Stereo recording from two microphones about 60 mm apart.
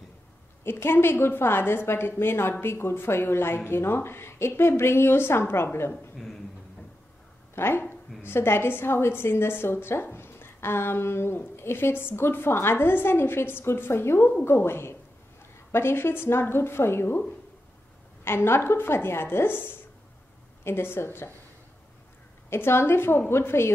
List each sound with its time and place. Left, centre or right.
0.7 s a woman's voice: left
6.1 s a sound: centre
7.5 s a woman's voice: left
18.2 s a woman's voice: left
22.5 s speech: left